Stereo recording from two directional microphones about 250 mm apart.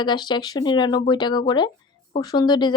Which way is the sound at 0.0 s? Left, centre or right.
Centre.